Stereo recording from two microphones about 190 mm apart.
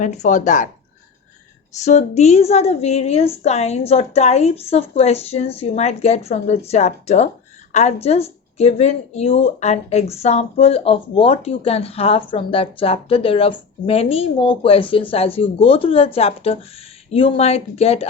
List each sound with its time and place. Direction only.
0.0 s speech: 40° left (ahead or behind)
1.8 s speech: 35° left (ahead or behind)